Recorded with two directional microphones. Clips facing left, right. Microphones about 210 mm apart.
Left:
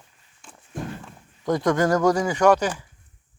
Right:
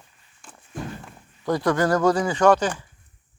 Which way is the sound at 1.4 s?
20° left (ahead or behind).